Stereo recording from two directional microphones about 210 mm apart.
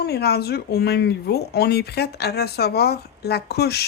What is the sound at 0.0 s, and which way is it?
Speech, 50° left (ahead or behind).